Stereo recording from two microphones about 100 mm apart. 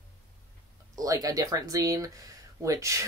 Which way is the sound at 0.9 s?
35° right (ahead or behind).